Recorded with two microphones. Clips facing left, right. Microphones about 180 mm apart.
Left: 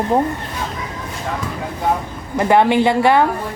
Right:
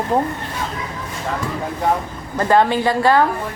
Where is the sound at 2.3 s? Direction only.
15° left (ahead or behind).